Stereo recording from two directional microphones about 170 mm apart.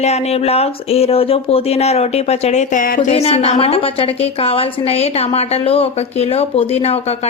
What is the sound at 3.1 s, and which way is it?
A woman's voice, 35° left (ahead or behind).